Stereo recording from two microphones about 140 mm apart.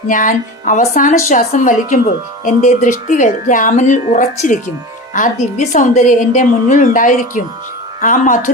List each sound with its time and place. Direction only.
0.1 s a woman's voice: 70° left (ahead or behind)